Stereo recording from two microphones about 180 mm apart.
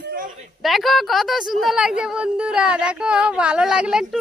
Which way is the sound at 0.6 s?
Centre (ahead or behind).